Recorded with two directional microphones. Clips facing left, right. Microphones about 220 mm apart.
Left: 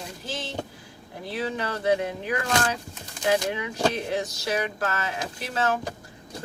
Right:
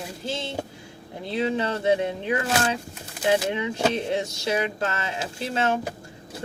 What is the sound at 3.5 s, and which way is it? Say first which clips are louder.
Speech: right 2 dB; 25° right (ahead or behind).